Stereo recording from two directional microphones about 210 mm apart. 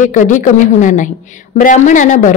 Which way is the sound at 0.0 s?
35° left (ahead or behind).